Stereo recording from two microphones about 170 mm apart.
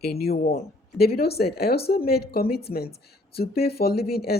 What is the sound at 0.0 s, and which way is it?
Speech, 65° left (ahead or behind).